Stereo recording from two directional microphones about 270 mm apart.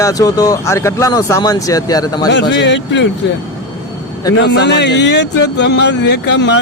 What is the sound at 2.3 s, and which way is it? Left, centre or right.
Speech, left.